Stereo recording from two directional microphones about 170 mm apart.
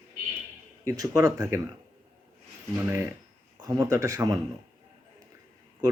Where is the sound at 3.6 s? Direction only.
15° right (ahead or behind).